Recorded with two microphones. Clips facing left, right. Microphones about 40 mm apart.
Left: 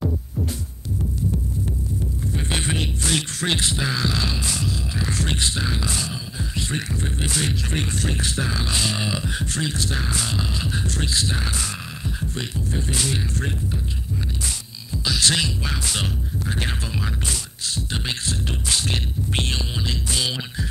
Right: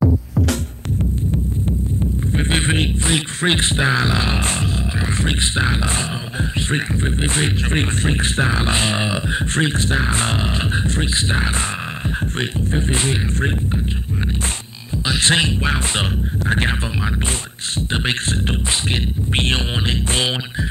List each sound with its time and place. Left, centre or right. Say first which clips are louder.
2.3 s a sound: right 7 dB; right
3.1 s speech: right 4 dB; right
15.0 s speech: right 4 dB; right
19.3 s speech: right 7 dB; right